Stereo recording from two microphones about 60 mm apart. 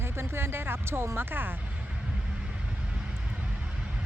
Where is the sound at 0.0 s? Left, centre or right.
Right.